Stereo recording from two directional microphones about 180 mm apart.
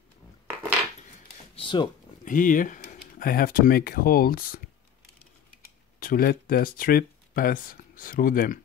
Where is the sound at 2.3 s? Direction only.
45° left (ahead or behind).